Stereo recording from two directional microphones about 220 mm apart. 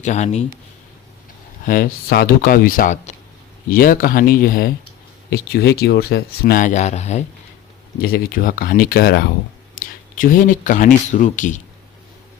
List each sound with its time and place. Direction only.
0.0 s speech: 30° left (ahead or behind)
1.6 s speech: 40° left (ahead or behind)
8.0 s speech: 40° left (ahead or behind)